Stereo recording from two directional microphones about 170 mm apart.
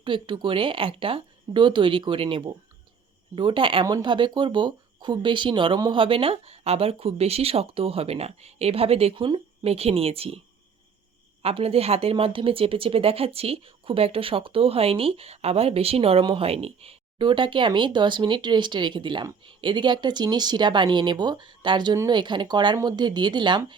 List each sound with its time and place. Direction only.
0.0 s speech: 30° right (ahead or behind)
11.4 s speech: 35° right (ahead or behind)